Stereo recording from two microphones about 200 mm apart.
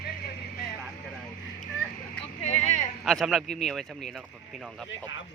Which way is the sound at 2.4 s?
35° left (ahead or behind).